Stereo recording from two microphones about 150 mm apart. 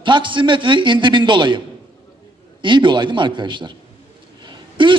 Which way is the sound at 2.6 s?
30° right (ahead or behind).